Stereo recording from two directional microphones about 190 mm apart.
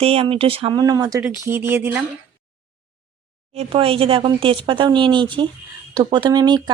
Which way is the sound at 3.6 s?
30° right (ahead or behind).